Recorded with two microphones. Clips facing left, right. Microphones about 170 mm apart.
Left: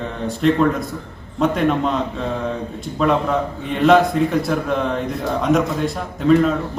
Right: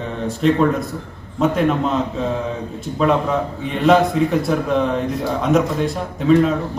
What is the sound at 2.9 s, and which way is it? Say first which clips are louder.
A man's voice: even; centre (ahead or behind).